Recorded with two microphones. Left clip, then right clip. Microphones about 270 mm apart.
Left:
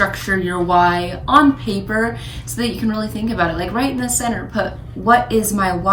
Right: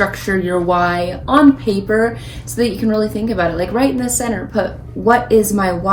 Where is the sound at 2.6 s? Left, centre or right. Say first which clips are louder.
Right 6 dB; centre.